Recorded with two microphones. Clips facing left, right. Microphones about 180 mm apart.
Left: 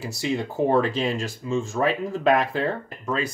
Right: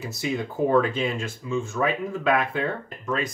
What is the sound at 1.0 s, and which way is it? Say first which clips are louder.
Speech: left 2 dB; 90° left.